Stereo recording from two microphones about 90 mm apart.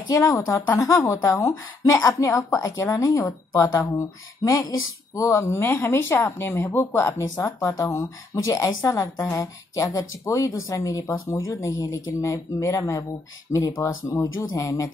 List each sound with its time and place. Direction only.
0.7 s speech: 40° left (ahead or behind)
2.9 s speech: 50° left (ahead or behind)
3.2 s speech: 40° left (ahead or behind)
7.3 s speech: 40° left (ahead or behind)